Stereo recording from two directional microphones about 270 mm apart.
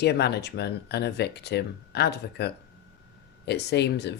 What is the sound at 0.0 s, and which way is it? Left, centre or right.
Speech, left.